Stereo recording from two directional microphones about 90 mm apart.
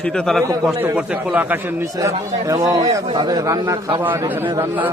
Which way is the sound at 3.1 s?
50° right (ahead or behind).